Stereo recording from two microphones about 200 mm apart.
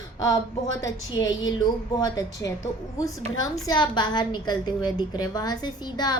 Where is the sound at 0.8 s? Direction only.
20° left (ahead or behind).